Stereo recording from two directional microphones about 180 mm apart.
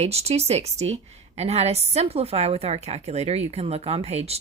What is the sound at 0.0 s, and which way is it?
A woman's voice, 35° right (ahead or behind).